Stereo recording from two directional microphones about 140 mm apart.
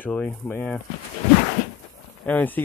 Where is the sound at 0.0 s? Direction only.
10° left (ahead or behind).